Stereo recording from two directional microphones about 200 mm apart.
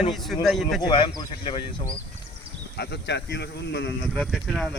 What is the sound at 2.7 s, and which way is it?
Speech, 55° left (ahead or behind).